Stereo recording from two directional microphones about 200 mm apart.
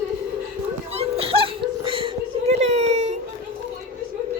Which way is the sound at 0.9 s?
30° right (ahead or behind).